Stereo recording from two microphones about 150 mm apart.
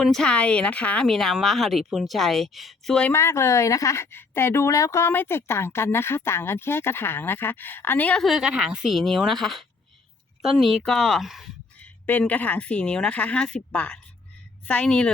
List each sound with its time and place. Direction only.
0.0 s a woman's voice: 5° left (ahead or behind)
3.1 s a woman's voice: 20° left (ahead or behind); by 11.4 s centre (ahead or behind)
11.8 s speech: 10° left (ahead or behind)